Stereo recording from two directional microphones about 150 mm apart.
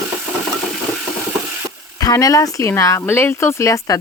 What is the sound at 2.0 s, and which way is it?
Speech, 25° left (ahead or behind).